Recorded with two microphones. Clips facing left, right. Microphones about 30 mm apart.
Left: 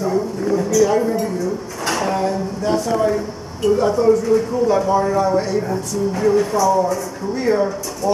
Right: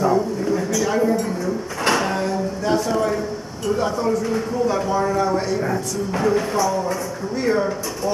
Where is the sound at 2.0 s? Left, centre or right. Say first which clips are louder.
Left 2 dB; centre.